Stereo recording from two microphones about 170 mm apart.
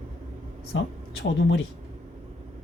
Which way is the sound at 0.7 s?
90° left.